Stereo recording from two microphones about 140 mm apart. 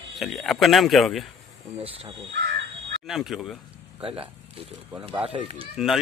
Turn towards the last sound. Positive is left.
turn(degrees=0)  # may be behind; listen again after turning